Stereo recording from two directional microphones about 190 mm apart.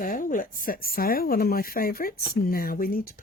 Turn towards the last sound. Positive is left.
turn(degrees=50)  # may be behind; listen again after turning